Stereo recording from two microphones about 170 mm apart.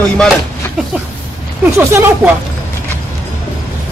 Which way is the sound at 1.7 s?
15° right (ahead or behind).